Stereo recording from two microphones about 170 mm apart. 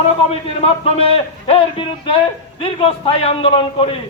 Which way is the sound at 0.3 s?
35° left (ahead or behind).